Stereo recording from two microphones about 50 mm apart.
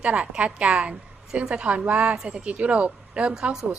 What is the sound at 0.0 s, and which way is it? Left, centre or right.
A woman's voice, right.